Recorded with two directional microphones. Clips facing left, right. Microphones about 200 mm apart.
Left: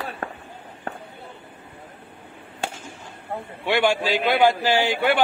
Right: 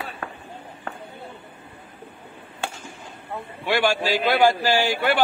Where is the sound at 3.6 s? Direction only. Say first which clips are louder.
Left 1 dB; 25° left (ahead or behind).